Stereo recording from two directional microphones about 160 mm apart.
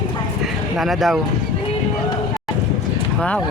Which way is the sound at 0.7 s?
Centre (ahead or behind).